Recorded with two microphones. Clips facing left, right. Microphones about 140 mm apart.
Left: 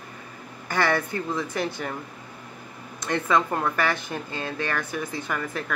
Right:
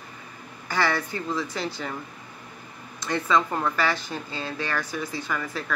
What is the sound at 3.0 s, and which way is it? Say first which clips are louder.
Speech: even; 55° left (ahead or behind).